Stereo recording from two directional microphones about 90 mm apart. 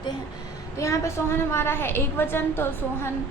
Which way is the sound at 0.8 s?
35° left (ahead or behind).